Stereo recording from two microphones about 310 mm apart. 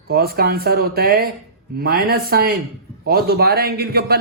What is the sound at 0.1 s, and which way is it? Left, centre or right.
A man's voice, right.